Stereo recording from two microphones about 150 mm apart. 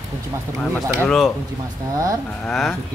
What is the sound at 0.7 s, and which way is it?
Speech, 5° left (ahead or behind).